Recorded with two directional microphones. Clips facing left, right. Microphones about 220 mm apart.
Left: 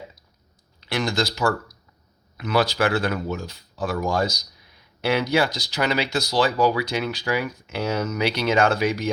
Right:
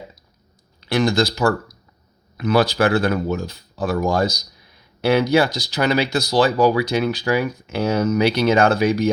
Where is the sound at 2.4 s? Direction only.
45° right (ahead or behind).